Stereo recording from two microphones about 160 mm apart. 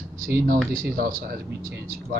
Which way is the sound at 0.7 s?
65° right (ahead or behind).